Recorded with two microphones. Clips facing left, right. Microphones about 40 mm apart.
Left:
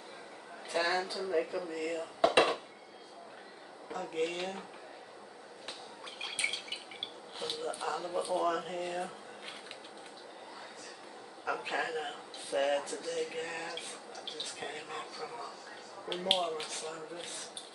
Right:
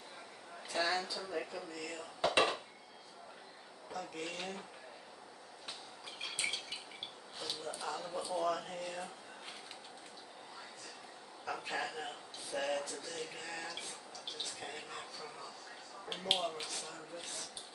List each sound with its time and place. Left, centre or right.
0.7 s speech: left
3.9 s speech: left
7.3 s speech: left
11.4 s speech: left